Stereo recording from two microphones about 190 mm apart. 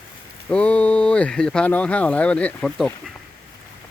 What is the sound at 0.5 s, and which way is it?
Speech, 5° left (ahead or behind).